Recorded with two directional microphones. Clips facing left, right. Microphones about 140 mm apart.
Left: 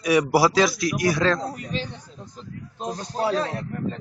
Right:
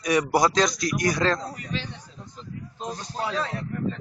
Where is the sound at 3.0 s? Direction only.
40° left (ahead or behind).